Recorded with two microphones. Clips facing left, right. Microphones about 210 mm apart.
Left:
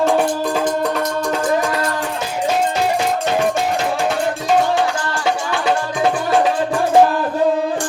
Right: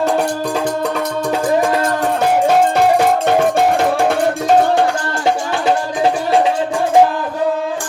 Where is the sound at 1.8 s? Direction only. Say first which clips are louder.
Right 4 dB; 40° right (ahead or behind).